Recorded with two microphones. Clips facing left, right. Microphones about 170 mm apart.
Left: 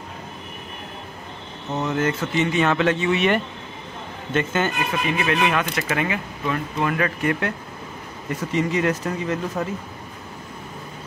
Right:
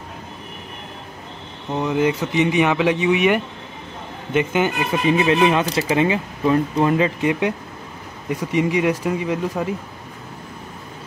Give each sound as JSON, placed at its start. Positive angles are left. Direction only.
{"t": 1.7, "sound": "speech", "side_deg": -10}
{"t": 5.0, "sound": "speech", "side_deg": -25}